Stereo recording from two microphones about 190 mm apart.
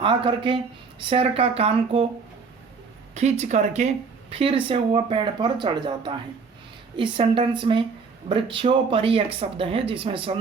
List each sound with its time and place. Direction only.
0.0 s speech: 25° right (ahead or behind)
3.2 s speech: 35° right (ahead or behind)